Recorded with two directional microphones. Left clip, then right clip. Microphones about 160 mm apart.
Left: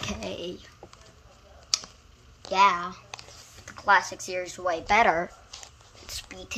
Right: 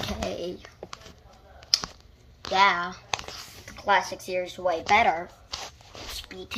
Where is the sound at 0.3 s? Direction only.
30° left (ahead or behind).